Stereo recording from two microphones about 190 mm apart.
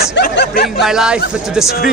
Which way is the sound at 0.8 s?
5° right (ahead or behind).